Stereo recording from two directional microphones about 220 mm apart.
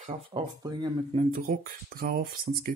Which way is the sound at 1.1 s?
40° right (ahead or behind).